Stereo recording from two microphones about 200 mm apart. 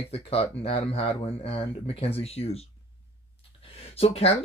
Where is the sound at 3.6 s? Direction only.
30° left (ahead or behind).